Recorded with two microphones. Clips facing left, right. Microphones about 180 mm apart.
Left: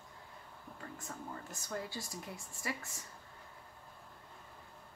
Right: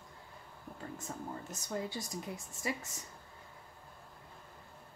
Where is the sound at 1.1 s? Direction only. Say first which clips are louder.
Right 3 dB; 20° right (ahead or behind).